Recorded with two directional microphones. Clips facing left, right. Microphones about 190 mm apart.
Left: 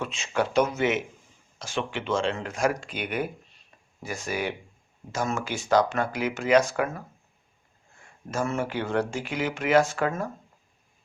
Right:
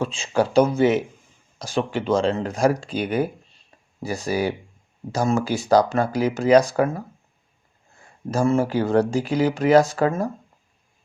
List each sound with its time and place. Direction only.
0.0 s speech: 30° right (ahead or behind)
8.3 s speech: 35° right (ahead or behind)